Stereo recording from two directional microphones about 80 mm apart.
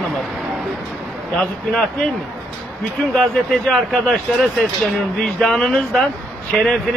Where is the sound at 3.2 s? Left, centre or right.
Centre.